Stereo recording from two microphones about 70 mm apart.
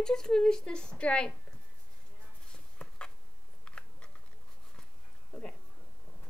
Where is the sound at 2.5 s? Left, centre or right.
Centre.